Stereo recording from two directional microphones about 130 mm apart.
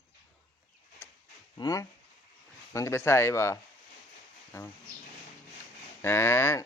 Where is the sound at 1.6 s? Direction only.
25° left (ahead or behind).